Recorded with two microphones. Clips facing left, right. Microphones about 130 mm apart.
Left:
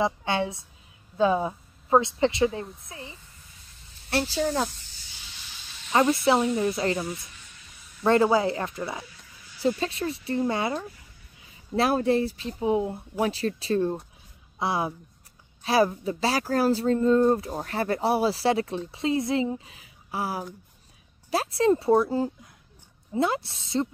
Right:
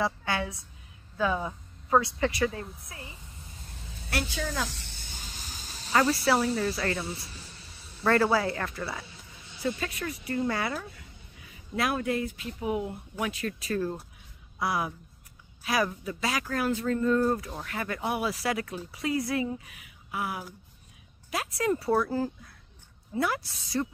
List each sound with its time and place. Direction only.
0.0 s speech: 25° left (ahead or behind)
4.1 s speech: 30° left (ahead or behind)
4.6 s snake: 75° right (ahead or behind); by 5.9 s 40° right (ahead or behind)
6.5 s speech: 20° left (ahead or behind)
7.1 s a sound: 30° right (ahead or behind)
8.0 s speech: 20° left (ahead or behind)
9.0 s a sound: 25° right (ahead or behind)
9.6 s speech: 25° left (ahead or behind)
17.5 s speech: 35° left (ahead or behind)